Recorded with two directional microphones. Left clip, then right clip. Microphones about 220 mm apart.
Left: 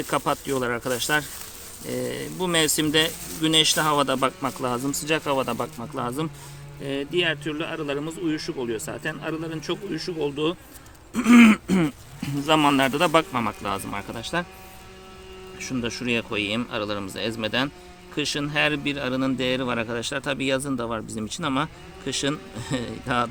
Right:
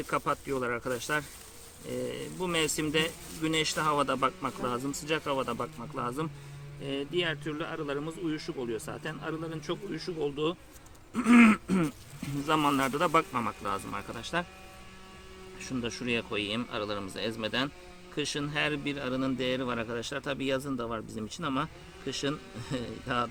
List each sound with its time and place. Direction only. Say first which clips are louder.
0.1 s a man's voice: left 6 dB; 25° left (ahead or behind)
15.5 s a man's voice: left 6 dB; 15° left (ahead or behind)